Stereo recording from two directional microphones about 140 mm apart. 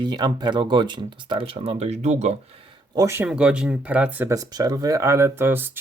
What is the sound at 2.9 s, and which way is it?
Speech, 20° right (ahead or behind).